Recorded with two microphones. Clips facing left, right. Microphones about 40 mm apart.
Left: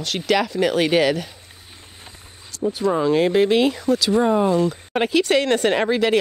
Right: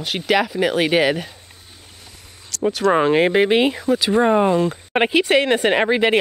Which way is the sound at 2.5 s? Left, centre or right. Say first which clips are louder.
Right 3 dB; right.